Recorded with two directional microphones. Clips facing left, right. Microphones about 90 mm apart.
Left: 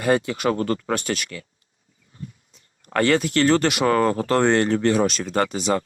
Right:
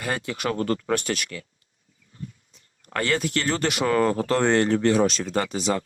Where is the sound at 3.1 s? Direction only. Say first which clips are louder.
Left 7 dB; 65° left (ahead or behind); by 4.9 s 50° left (ahead or behind).